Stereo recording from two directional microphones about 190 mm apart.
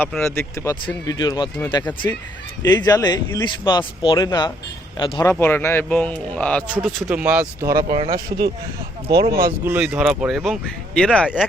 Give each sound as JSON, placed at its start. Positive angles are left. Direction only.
{"t": 0.0, "sound": "a man's voice", "side_deg": 10}
{"t": 2.6, "sound": "a man's voice", "side_deg": 20}
{"t": 6.7, "sound": "speech", "side_deg": -5}
{"t": 7.9, "sound": "speech", "side_deg": -30}
{"t": 9.6, "sound": "speech", "side_deg": -10}